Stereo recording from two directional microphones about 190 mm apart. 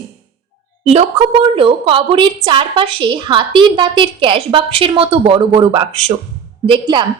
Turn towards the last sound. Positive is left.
turn(degrees=-25)  # may be behind; listen again after turning